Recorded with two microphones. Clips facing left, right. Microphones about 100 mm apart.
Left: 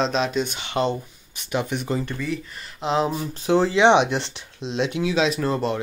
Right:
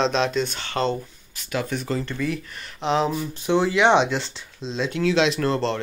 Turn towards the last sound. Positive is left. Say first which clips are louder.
# right 1 dB
turn(degrees=10)  # may be behind; listen again after turning